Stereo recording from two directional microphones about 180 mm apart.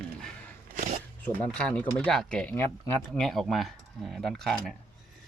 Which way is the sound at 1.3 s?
5° left (ahead or behind).